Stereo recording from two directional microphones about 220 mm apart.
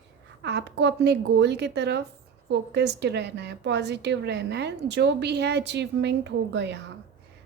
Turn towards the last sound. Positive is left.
turn(degrees=-50)  # may be behind; listen again after turning